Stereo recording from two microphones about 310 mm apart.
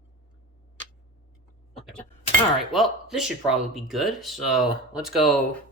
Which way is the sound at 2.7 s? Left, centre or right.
Centre.